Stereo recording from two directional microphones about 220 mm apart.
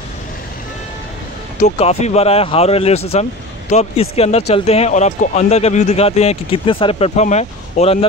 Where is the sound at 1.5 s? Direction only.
30° left (ahead or behind).